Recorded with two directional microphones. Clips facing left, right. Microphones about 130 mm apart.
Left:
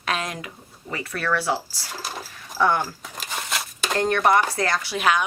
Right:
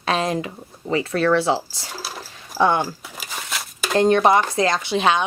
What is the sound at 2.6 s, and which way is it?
Speech, 20° right (ahead or behind).